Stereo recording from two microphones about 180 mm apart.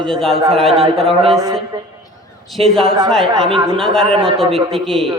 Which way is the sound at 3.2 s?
25° right (ahead or behind).